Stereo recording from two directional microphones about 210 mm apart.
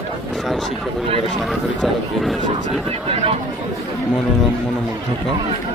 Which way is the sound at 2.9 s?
25° right (ahead or behind).